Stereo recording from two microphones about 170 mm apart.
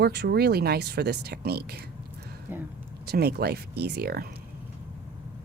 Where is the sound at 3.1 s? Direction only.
70° right (ahead or behind).